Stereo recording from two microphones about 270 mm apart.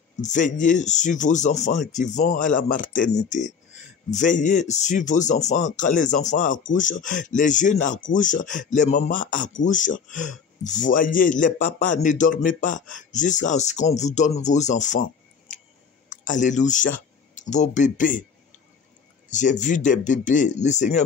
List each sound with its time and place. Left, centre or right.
0.2 s speech: left
16.1 s speech: left
19.2 s speech: left